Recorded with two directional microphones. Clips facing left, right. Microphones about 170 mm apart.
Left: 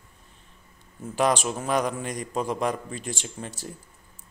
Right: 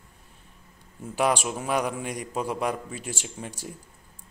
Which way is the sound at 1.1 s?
10° right (ahead or behind).